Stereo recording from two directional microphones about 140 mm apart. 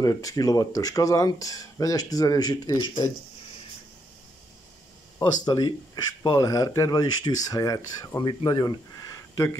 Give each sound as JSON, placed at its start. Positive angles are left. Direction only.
{"t": 0.0, "sound": "speech", "side_deg": 25}
{"t": 5.2, "sound": "speech", "side_deg": 25}